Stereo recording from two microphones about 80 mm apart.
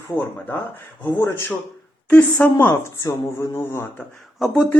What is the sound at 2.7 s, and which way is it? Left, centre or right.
Speech, left.